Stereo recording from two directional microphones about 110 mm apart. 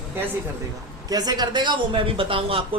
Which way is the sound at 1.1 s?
35° right (ahead or behind).